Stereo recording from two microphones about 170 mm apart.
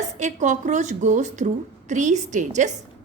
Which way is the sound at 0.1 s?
45° right (ahead or behind).